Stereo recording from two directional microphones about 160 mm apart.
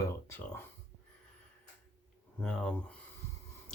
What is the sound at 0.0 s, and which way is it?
Speech, 15° left (ahead or behind).